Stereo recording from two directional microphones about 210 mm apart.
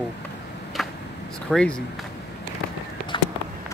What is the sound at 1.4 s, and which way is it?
Speech, 5° left (ahead or behind).